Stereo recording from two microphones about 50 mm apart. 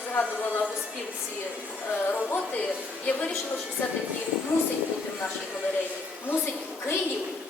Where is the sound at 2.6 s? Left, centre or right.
Left.